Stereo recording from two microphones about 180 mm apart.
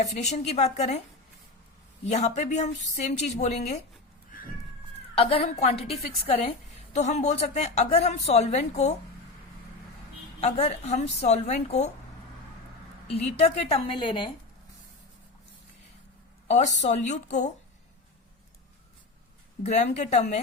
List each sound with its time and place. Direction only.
0.0 s speech: 40° left (ahead or behind)
2.0 s speech: 40° left (ahead or behind)
5.1 s speech: 35° left (ahead or behind)
10.4 s speech: 35° left (ahead or behind)
13.2 s speech: 35° left (ahead or behind)
16.5 s speech: 40° left (ahead or behind)
19.6 s speech: 40° left (ahead or behind)